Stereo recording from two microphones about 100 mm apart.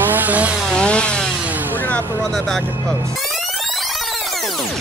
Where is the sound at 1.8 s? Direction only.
15° left (ahead or behind).